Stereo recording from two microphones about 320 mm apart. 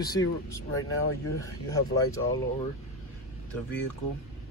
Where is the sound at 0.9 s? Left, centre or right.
Left.